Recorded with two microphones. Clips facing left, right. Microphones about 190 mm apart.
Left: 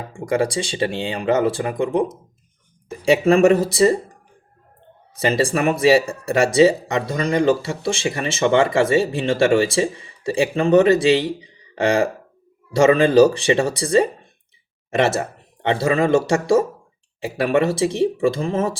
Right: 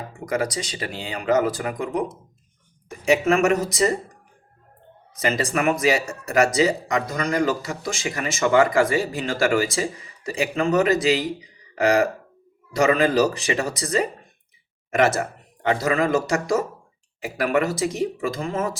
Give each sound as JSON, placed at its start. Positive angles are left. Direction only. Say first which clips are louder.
{"t": 0.1, "sound": "speech", "louder": "left 5 dB", "side_deg": 30}
{"t": 5.1, "sound": "speech", "louder": "left 4 dB", "side_deg": 30}